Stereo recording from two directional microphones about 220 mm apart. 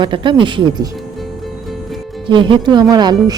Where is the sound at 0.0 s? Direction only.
20° right (ahead or behind).